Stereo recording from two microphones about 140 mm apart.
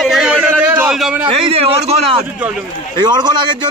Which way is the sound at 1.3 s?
40° right (ahead or behind).